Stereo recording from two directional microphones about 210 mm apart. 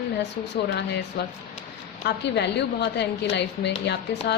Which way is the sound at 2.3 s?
55° left (ahead or behind).